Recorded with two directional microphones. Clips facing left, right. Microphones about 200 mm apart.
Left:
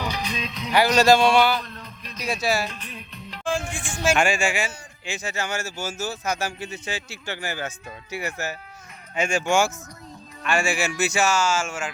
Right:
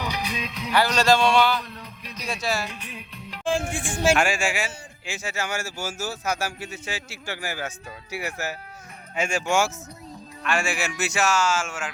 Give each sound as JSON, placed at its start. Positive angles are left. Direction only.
{"t": 0.0, "sound": "music", "side_deg": -15}
{"t": 0.7, "sound": "speech", "side_deg": 10}
{"t": 1.6, "sound": "music", "side_deg": -10}
{"t": 2.2, "sound": "speech", "side_deg": 10}
{"t": 2.6, "sound": "music", "side_deg": -10}
{"t": 3.6, "sound": "speech", "side_deg": -35}
{"t": 4.1, "sound": "a man's voice", "side_deg": -5}